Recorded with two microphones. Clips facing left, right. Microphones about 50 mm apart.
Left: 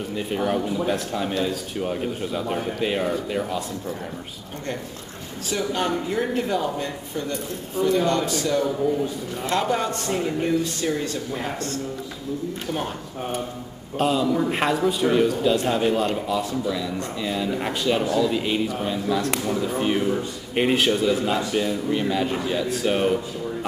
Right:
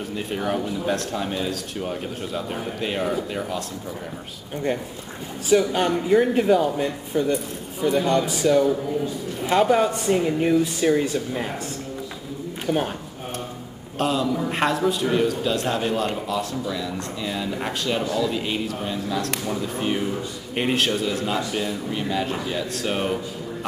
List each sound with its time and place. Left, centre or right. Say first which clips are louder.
0.1 s speech: left 2 dB; centre
5.5 s speech: right 5 dB; centre
12.6 s speech: right 7 dB; centre
13.9 s speech: left 2 dB; centre